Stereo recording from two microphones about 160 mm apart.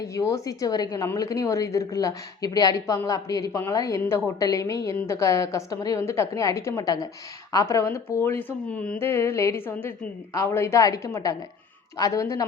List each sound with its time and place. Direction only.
0.1 s a woman's voice: 20° left (ahead or behind)